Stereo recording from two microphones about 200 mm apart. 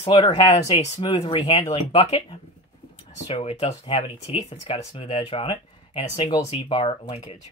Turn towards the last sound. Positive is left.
turn(degrees=25)  # may be behind; listen again after turning